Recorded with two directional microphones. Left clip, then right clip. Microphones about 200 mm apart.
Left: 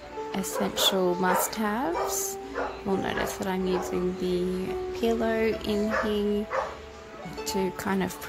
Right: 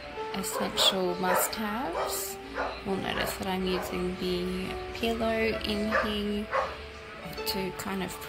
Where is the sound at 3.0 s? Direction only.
30° left (ahead or behind).